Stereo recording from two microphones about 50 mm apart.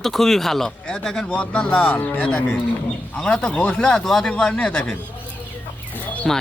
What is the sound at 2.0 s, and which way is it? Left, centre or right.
Speech, left.